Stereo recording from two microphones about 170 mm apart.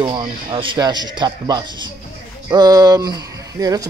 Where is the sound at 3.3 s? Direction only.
20° right (ahead or behind).